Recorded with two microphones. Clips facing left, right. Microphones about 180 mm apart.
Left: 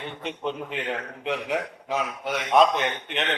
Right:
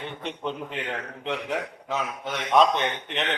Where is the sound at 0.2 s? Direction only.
5° left (ahead or behind).